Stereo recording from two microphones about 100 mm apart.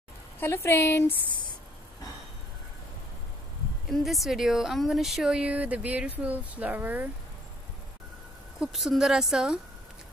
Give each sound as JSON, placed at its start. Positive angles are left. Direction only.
{"t": 0.4, "sound": "a woman's voice", "side_deg": 25}
{"t": 3.9, "sound": "speech", "side_deg": 0}
{"t": 8.5, "sound": "a woman's voice", "side_deg": -5}